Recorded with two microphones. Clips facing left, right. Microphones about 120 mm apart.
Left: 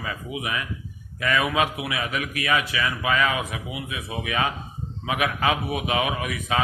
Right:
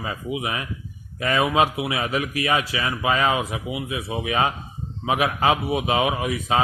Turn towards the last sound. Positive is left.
turn(degrees=-30)  # may be behind; listen again after turning